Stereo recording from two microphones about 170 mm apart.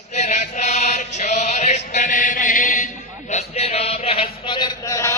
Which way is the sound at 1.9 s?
50° left (ahead or behind).